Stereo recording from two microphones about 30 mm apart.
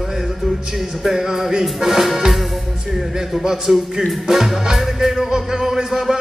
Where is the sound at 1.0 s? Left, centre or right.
Centre.